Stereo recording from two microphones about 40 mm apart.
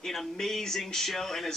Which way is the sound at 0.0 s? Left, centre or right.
Centre.